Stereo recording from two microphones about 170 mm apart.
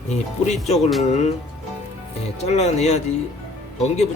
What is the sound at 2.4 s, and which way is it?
Speech, 40° left (ahead or behind).